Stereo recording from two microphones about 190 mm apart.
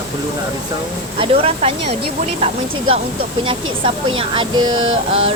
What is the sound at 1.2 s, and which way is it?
Speech, 30° right (ahead or behind).